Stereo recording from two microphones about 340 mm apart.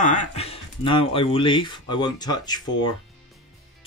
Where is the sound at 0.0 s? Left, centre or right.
Left.